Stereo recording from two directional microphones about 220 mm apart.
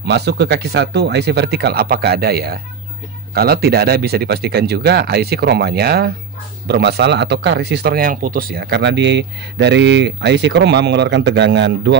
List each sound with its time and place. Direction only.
0.0 s speech: 50° right (ahead or behind)